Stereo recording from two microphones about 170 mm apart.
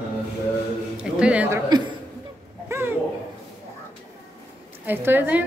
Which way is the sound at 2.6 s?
15° right (ahead or behind).